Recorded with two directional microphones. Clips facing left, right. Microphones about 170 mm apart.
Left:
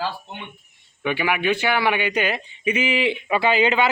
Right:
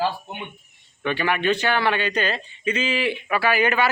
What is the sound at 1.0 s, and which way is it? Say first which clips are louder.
A man's voice: even; 10° left (ahead or behind).